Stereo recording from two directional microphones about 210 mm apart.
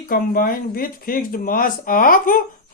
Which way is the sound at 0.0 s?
45° left (ahead or behind).